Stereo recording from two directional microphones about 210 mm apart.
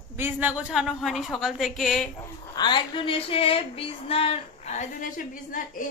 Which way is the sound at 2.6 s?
20° left (ahead or behind).